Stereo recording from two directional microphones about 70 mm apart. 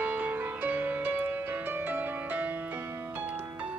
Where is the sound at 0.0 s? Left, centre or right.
Right.